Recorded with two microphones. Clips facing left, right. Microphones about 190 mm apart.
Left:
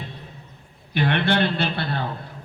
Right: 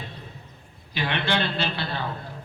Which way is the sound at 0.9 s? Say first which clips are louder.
Left 5 dB; 55° left (ahead or behind).